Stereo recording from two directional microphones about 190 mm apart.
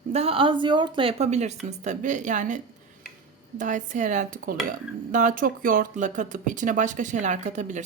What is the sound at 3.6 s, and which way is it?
Speech, 40° right (ahead or behind).